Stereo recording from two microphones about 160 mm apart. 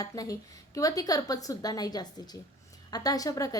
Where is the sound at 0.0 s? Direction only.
20° left (ahead or behind).